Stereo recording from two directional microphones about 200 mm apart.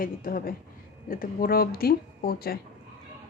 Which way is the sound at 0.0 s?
45° left (ahead or behind).